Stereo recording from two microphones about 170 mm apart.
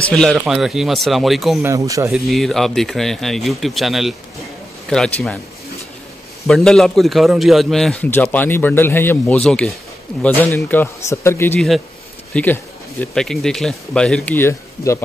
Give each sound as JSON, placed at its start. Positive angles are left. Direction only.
{"t": 0.1, "sound": "a man's voice", "side_deg": 5}
{"t": 1.6, "sound": "speech", "side_deg": -20}
{"t": 2.1, "sound": "a man's voice", "side_deg": 0}
{"t": 6.4, "sound": "a man's voice", "side_deg": 5}